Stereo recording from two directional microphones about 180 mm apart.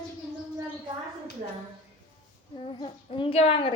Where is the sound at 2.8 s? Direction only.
25° left (ahead or behind).